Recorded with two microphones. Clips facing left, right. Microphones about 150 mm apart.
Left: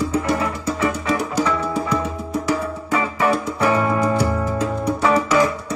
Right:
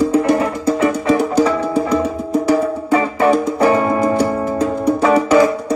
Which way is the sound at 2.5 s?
30° right (ahead or behind).